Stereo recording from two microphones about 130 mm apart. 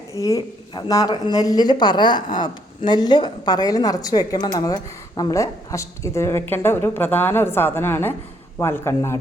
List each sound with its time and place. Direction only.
0.1 s speech: 25° left (ahead or behind)